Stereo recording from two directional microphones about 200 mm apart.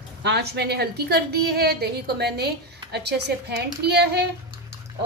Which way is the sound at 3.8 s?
55° right (ahead or behind).